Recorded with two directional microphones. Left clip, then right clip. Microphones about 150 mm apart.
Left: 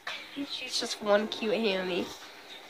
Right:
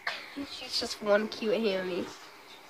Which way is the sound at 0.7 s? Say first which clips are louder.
Even; 10° right (ahead or behind).